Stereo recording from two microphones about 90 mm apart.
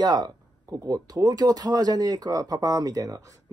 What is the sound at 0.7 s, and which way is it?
Speech, 45° right (ahead or behind).